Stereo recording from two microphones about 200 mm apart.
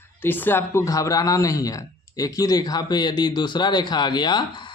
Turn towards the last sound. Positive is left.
turn(degrees=20)  # may be behind; listen again after turning